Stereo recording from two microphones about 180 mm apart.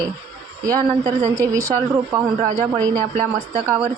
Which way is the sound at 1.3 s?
15° right (ahead or behind).